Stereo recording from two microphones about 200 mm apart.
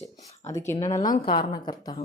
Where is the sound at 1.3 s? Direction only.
20° left (ahead or behind).